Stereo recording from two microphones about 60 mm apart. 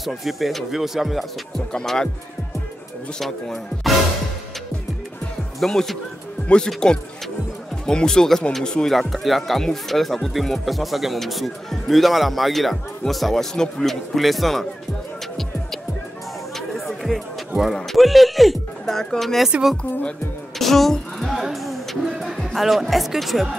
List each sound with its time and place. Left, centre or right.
0.0 s speech: centre
1.7 s speech: centre
3.2 s speech: centre
5.6 s speech: centre
6.4 s speech: centre
7.8 s speech: centre
16.5 s music: centre
17.9 s speech: centre
19.8 s speech: centre
20.5 s speech: centre